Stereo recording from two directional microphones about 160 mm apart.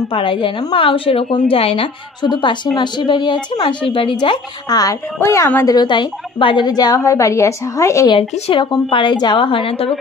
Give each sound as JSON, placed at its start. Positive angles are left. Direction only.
{"t": 0.1, "sound": "a woman's voice", "side_deg": 30}
{"t": 5.8, "sound": "a woman's voice", "side_deg": 30}
{"t": 8.1, "sound": "a woman's voice", "side_deg": 35}